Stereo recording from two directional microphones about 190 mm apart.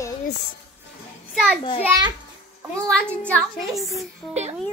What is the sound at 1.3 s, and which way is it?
Speech, centre (ahead or behind).